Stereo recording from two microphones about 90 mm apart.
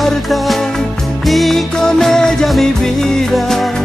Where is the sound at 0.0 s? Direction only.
Centre (ahead or behind).